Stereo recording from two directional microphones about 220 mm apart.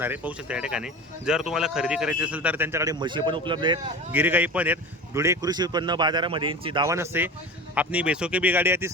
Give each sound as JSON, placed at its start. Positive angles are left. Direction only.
{"t": 0.0, "sound": "speech", "side_deg": -5}
{"t": 4.1, "sound": "speech", "side_deg": -10}